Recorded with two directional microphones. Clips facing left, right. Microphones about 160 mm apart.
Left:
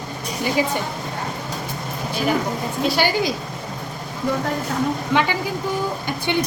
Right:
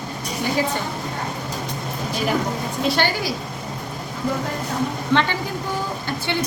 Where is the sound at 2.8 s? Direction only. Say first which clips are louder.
Left 1 dB; centre (ahead or behind).